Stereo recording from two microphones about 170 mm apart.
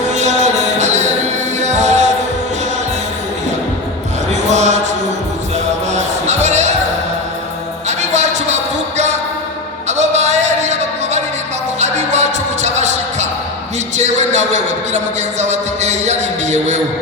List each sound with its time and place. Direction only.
0.1 s music: 45° right (ahead or behind)
4.3 s basketball bounce: 40° right (ahead or behind)
5.9 s music: 40° right (ahead or behind)
7.9 s music: 40° right (ahead or behind)
10.0 s a sound: 40° right (ahead or behind)
11.8 s music: 40° right (ahead or behind)
13.9 s a sound: 40° right (ahead or behind)